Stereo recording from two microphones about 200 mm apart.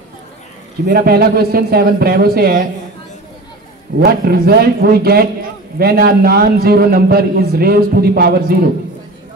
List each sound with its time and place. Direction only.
0.8 s a man's voice: 50° right (ahead or behind)
4.0 s a man's voice: 50° right (ahead or behind)